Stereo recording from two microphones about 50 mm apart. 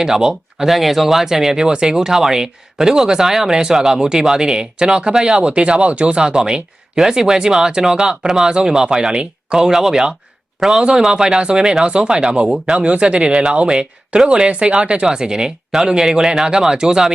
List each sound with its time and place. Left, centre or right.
0.0 s speech: centre